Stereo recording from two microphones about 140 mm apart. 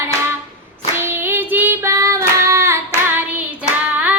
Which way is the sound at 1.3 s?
15° right (ahead or behind).